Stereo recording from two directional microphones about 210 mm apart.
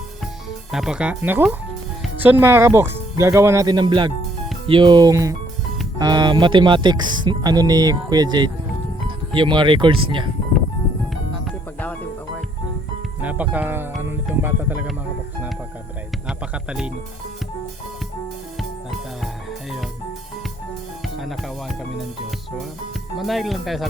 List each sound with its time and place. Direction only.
0.7 s speech: 5° right (ahead or behind); by 10.2 s 25° right (ahead or behind)
13.2 s speech: 5° right (ahead or behind)
16.6 s speech: 5° right (ahead or behind)
23.1 s speech: centre (ahead or behind)